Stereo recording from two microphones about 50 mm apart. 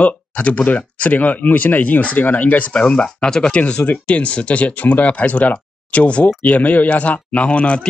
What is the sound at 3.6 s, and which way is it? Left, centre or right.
Speech, left.